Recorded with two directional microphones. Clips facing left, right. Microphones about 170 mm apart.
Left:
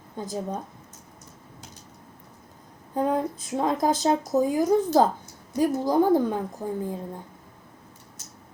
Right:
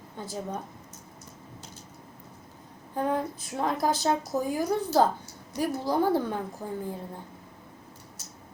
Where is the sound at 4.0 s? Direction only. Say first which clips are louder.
Left 5 dB; 20° left (ahead or behind).